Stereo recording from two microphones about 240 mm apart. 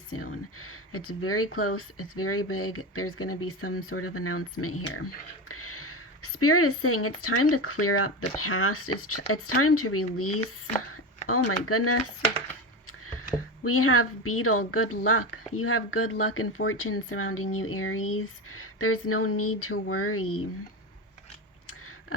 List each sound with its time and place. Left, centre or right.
0.1 s speech: left
11.6 s speech: left
13.7 s speech: left